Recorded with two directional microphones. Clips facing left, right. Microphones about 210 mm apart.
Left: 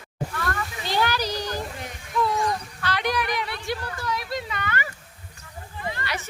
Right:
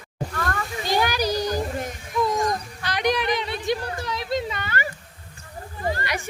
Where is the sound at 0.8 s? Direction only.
15° right (ahead or behind).